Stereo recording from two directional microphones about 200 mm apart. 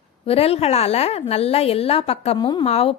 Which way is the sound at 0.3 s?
30° left (ahead or behind).